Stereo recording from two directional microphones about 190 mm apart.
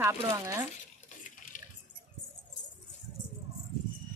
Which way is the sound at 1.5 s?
45° left (ahead or behind).